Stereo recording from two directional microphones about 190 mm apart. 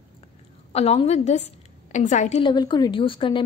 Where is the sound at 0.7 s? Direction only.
35° left (ahead or behind).